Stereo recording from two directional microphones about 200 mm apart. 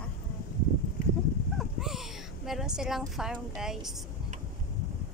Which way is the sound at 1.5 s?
Centre (ahead or behind).